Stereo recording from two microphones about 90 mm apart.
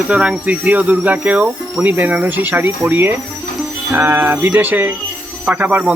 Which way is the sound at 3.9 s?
25° right (ahead or behind).